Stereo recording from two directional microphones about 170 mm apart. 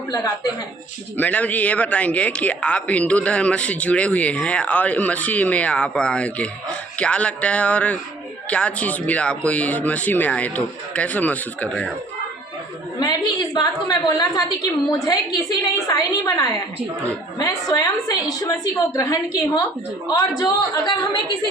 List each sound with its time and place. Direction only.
0.1 s a woman's voice: 20° left (ahead or behind)
1.1 s a man's voice: 10° left (ahead or behind)
13.0 s a woman's voice: 25° left (ahead or behind)